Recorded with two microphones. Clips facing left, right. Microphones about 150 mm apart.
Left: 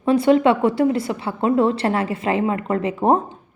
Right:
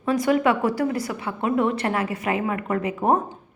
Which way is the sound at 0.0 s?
30° left (ahead or behind).